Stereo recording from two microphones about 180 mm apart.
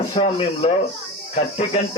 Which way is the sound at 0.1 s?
30° left (ahead or behind).